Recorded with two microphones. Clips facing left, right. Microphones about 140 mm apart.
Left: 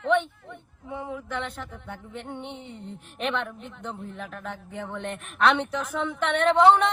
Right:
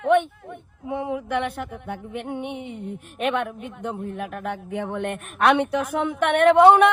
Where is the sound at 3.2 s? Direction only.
50° right (ahead or behind).